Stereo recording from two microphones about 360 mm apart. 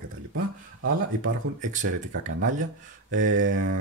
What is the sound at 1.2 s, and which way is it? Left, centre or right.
Speech, right.